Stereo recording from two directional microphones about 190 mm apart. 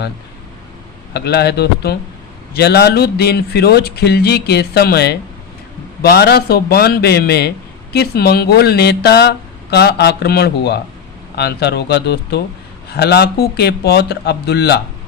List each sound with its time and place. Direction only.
1.1 s speech: 60° left (ahead or behind)